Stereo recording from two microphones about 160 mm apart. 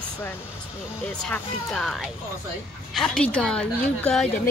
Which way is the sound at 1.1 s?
5° left (ahead or behind).